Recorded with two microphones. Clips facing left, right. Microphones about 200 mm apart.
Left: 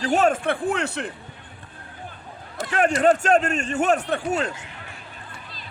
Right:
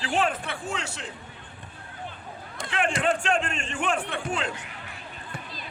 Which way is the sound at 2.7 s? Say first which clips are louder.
Left 7 dB; 45° left (ahead or behind).